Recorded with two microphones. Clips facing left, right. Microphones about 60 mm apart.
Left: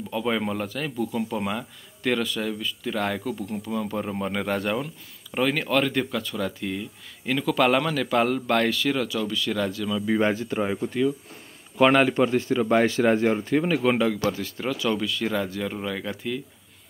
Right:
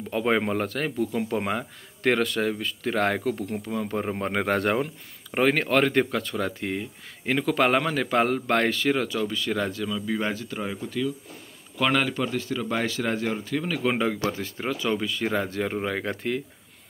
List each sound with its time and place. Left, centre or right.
0.1 s speech: right
3.9 s speech: right
10.0 s a man's voice: left
13.9 s speech: right